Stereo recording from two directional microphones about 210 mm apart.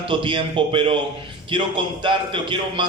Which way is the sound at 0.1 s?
25° right (ahead or behind).